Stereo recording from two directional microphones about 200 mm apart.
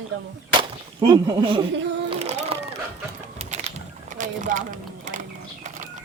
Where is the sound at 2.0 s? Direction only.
30° right (ahead or behind).